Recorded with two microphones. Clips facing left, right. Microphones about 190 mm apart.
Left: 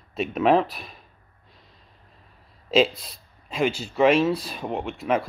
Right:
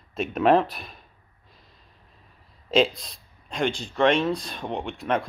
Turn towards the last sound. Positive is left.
turn(degrees=5)  # may be behind; listen again after turning